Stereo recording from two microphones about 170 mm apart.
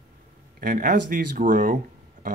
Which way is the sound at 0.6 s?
55° right (ahead or behind).